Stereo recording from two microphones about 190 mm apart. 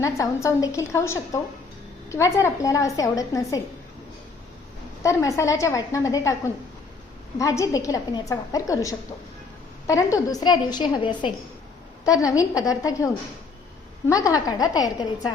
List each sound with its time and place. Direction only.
0.0 s a woman's voice: 15° left (ahead or behind)
5.0 s a woman's voice: 15° left (ahead or behind)
7.3 s a woman's voice: 15° left (ahead or behind)
14.1 s a woman's voice: 15° left (ahead or behind)